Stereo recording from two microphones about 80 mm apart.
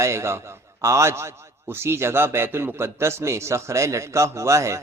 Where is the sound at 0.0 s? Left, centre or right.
Right.